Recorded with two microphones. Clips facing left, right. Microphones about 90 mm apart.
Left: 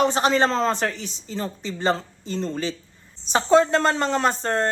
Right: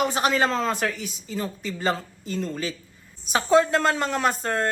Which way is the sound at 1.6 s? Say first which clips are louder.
Left 2 dB; 30° left (ahead or behind).